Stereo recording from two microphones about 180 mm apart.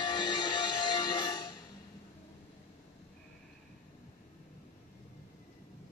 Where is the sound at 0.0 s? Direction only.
25° left (ahead or behind).